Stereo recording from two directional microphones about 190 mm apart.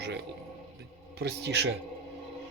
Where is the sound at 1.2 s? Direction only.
60° right (ahead or behind).